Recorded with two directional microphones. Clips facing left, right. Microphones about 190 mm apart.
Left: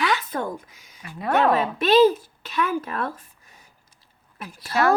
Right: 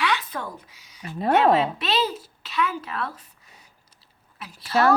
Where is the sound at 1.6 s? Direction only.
50° left (ahead or behind).